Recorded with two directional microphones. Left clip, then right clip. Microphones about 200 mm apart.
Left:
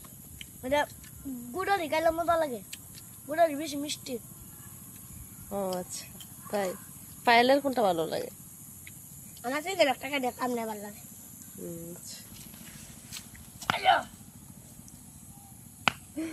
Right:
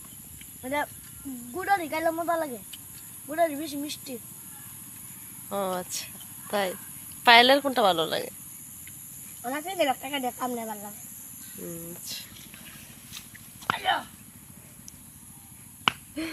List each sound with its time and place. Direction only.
0.6 s speech: 30° left (ahead or behind)
5.5 s a woman's voice: 5° right (ahead or behind)
9.4 s speech: 20° left (ahead or behind)
13.7 s a sound: 20° left (ahead or behind)
16.2 s a woman's voice: 5° left (ahead or behind)